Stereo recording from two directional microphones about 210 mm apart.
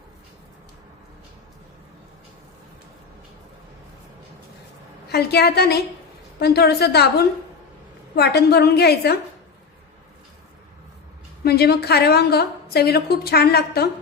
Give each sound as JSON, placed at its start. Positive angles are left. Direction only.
{"t": 5.0, "sound": "a woman's voice", "side_deg": 50}
{"t": 11.4, "sound": "a woman's voice", "side_deg": 50}